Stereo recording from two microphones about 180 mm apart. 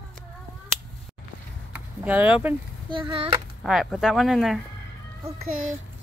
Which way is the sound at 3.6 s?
5° right (ahead or behind).